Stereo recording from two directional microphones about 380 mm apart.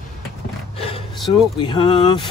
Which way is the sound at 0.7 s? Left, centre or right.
Centre.